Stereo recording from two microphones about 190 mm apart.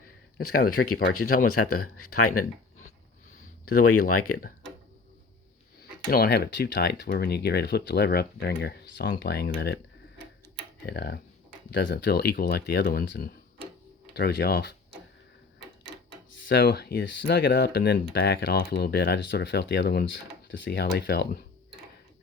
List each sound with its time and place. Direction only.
0.3 s speech: 55° left (ahead or behind)
3.7 s speech: 50° left (ahead or behind)
6.1 s speech: 55° left (ahead or behind)
10.8 s speech: 60° left (ahead or behind)
16.5 s speech: 60° left (ahead or behind)